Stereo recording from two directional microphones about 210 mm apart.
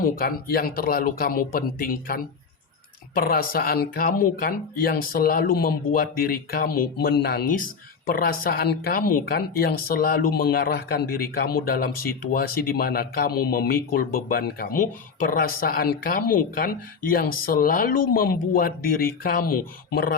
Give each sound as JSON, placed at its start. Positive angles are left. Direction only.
{"t": 0.0, "sound": "speech", "side_deg": 45}